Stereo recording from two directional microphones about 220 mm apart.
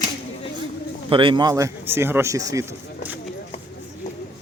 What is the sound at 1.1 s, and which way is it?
Speech, 25° right (ahead or behind).